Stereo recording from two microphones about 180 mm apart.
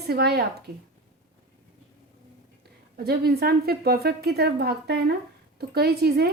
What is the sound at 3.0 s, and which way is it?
A woman's voice, 60° right (ahead or behind).